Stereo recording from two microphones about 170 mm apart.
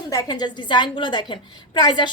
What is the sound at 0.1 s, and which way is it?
A woman's voice, 20° left (ahead or behind).